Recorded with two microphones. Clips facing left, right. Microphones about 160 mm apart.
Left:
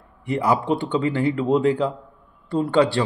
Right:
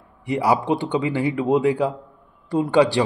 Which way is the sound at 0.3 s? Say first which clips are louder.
Right 1 dB; 10° right (ahead or behind).